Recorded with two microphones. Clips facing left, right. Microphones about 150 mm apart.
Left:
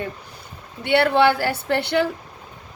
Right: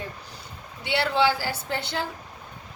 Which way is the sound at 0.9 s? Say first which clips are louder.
Left 6 dB; 55° left (ahead or behind).